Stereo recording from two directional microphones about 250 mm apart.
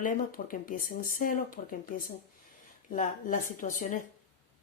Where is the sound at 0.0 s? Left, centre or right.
Left.